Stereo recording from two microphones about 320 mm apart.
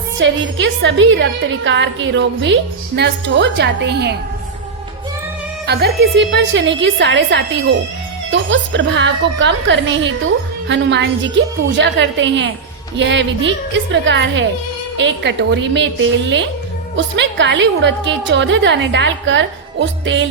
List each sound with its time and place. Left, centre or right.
0.2 s a woman's voice: right
5.6 s a woman's voice: right